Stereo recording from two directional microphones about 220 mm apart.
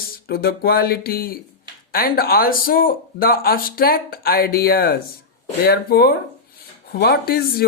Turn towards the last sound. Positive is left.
turn(degrees=45)  # may be behind; listen again after turning